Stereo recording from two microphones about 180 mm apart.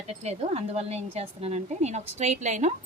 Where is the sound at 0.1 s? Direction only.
35° right (ahead or behind).